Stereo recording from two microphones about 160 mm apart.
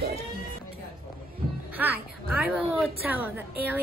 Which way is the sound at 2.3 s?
5° right (ahead or behind).